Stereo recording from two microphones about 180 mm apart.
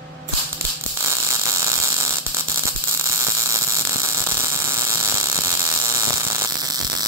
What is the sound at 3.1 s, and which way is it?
Mains hum, 15° right (ahead or behind).